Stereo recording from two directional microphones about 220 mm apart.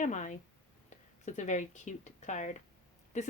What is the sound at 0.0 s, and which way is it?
Speech, 35° left (ahead or behind).